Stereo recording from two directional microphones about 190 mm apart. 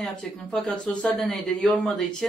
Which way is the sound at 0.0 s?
Centre (ahead or behind).